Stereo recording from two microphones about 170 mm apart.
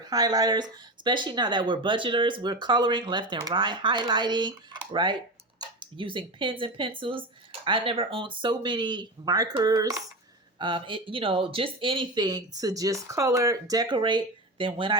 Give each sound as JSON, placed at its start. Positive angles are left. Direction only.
{"t": 0.0, "sound": "speech", "side_deg": -25}